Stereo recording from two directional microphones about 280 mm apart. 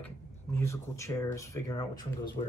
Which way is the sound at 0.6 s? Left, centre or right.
Centre.